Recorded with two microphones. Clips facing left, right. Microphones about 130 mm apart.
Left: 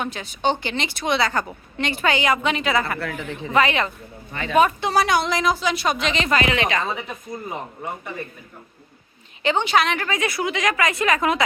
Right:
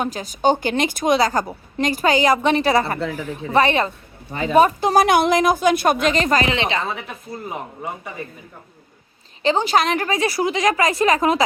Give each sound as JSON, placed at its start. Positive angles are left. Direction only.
{"t": 0.0, "sound": "a woman's voice", "side_deg": -40}
{"t": 3.1, "sound": "speech", "side_deg": -5}
{"t": 3.5, "sound": "a woman's voice", "side_deg": -35}
{"t": 6.8, "sound": "speech", "side_deg": 0}
{"t": 9.4, "sound": "a woman's voice", "side_deg": -35}